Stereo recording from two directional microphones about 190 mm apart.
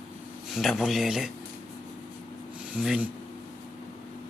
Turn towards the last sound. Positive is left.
turn(degrees=-5)  # may be behind; listen again after turning